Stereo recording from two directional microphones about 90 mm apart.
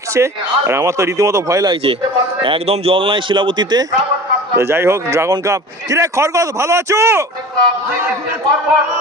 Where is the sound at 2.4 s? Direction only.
90° right; by 3.9 s 50° right (ahead or behind).